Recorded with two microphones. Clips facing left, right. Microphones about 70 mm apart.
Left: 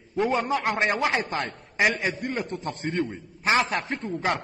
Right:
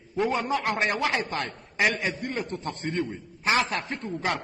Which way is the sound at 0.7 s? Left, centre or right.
Left.